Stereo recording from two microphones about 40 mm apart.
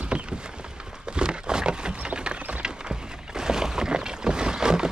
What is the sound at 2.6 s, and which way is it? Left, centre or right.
Boat, centre.